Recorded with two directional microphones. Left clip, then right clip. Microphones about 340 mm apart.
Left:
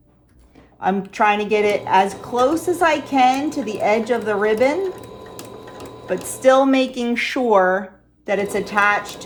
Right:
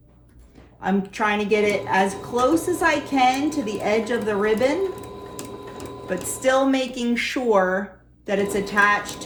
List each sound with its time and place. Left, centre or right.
0.8 s a woman's voice: left
6.1 s a woman's voice: left